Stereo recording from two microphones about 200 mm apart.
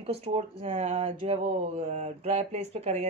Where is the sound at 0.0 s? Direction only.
30° right (ahead or behind).